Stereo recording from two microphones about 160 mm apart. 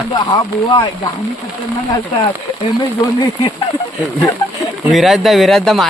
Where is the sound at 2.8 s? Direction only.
30° left (ahead or behind).